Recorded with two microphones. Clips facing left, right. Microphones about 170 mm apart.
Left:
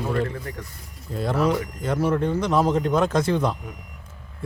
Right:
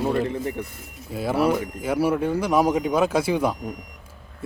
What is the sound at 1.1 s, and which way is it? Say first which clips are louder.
Speech: right 1 dB; 5° right (ahead or behind).